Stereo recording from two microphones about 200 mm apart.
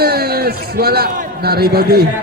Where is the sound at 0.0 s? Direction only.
50° right (ahead or behind).